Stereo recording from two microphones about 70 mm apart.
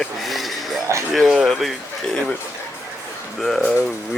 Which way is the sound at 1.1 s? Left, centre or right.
Centre.